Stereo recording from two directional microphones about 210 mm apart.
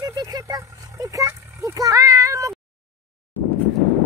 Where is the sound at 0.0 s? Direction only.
20° right (ahead or behind).